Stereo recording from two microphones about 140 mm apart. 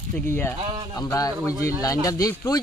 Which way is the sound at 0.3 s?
15° left (ahead or behind).